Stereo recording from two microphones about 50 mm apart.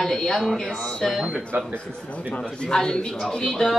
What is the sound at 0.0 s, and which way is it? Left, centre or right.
A woman's voice, centre.